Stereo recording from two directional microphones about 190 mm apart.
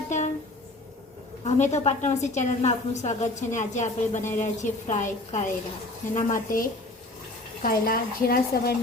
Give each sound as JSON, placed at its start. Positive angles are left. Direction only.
{"t": 0.1, "sound": "music", "side_deg": 40}
{"t": 1.5, "sound": "a woman's voice", "side_deg": 40}